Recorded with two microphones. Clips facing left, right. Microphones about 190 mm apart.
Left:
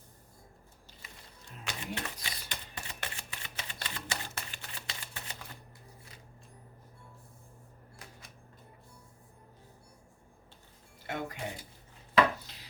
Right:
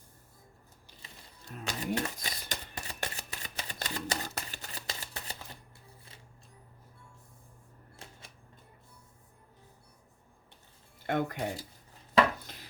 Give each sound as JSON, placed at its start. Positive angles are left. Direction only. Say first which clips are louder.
{"t": 1.5, "sound": "a sound", "louder": "right 6 dB", "side_deg": -40}
{"t": 11.0, "sound": "speech", "louder": "right 7 dB", "side_deg": -55}
{"t": 12.4, "sound": "wood", "louder": "right 4 dB", "side_deg": -50}